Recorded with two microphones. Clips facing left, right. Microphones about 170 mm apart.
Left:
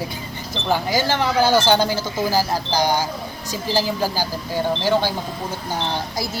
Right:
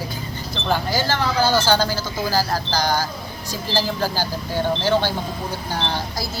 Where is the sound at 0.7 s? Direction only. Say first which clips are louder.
Left 2 dB; 15° left (ahead or behind).